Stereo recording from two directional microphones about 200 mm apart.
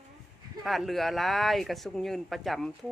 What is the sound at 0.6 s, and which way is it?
Speech, centre (ahead or behind).